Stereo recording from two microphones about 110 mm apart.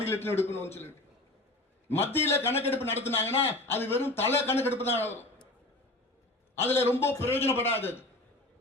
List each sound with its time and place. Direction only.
0.0 s speech: 20° left (ahead or behind)
6.6 s speech: 20° left (ahead or behind)